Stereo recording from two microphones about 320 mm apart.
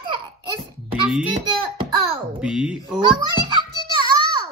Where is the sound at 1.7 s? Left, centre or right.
Centre.